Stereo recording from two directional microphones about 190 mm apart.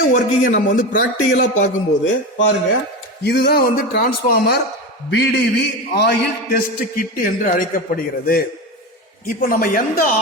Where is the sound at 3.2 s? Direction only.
60° left (ahead or behind).